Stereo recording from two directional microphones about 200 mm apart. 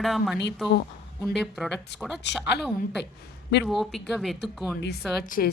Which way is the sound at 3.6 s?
Centre (ahead or behind).